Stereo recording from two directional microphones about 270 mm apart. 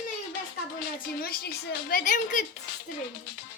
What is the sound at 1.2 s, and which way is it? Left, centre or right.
A woman's voice, left.